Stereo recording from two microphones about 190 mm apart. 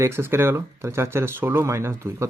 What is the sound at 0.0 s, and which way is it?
Speech, 10° right (ahead or behind).